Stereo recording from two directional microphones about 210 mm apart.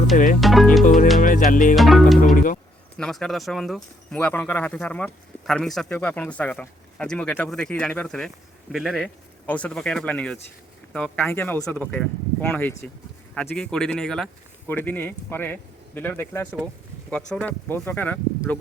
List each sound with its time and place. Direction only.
0.3 s speech: centre (ahead or behind)
1.2 s music: 40° left (ahead or behind)
1.7 s speech: centre (ahead or behind)
2.2 s music: 40° left (ahead or behind)
3.0 s speech: centre (ahead or behind)